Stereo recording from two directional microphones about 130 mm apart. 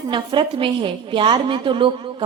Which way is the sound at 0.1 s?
40° right (ahead or behind).